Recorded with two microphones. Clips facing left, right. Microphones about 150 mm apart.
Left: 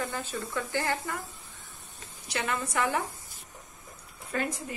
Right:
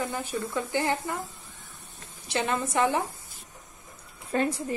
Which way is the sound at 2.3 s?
25° right (ahead or behind).